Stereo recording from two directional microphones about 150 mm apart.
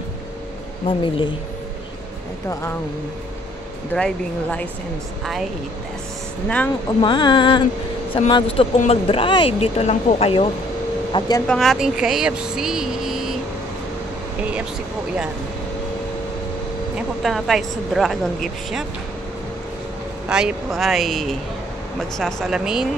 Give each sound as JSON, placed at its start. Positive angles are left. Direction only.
{"t": 0.8, "sound": "a sound", "side_deg": 35}
{"t": 3.9, "sound": "speech", "side_deg": 10}
{"t": 7.0, "sound": "a sound", "side_deg": 30}
{"t": 8.7, "sound": "speech", "side_deg": 45}
{"t": 11.1, "sound": "speech", "side_deg": 25}
{"t": 11.4, "sound": "speech", "side_deg": 0}
{"t": 14.4, "sound": "speech", "side_deg": -10}
{"t": 16.9, "sound": "speech", "side_deg": 0}
{"t": 20.2, "sound": "speech", "side_deg": -5}